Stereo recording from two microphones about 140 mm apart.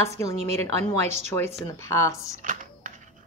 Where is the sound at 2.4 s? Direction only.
65° right (ahead or behind).